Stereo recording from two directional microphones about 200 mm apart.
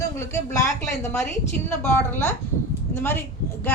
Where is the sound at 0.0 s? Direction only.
15° left (ahead or behind).